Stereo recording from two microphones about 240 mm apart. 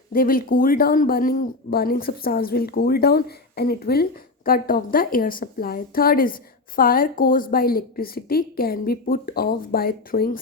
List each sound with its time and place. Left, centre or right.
0.1 s speech: left